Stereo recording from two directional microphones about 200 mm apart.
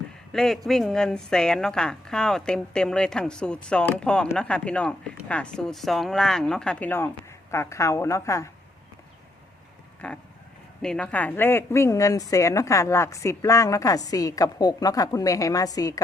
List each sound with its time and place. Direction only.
0.3 s a woman's voice: centre (ahead or behind)
10.0 s a woman's voice: 5° left (ahead or behind)